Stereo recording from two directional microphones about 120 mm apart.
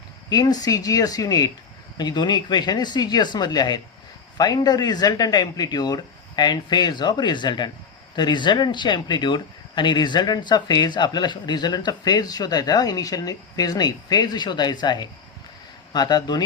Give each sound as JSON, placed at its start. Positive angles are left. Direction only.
{"t": 0.3, "sound": "speech", "side_deg": 30}